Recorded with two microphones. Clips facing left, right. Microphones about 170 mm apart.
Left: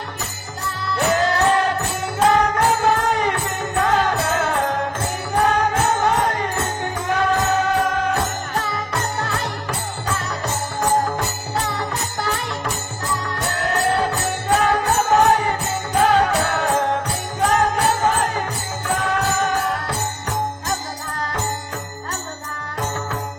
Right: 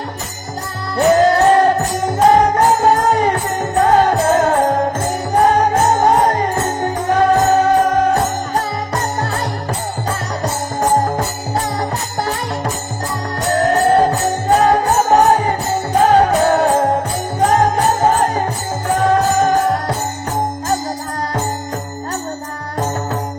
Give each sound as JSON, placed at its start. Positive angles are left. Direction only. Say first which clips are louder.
{"t": 0.9, "sound": "music", "louder": "right 8 dB", "side_deg": -40}
{"t": 18.9, "sound": "jingle bell", "louder": "right 8 dB", "side_deg": -35}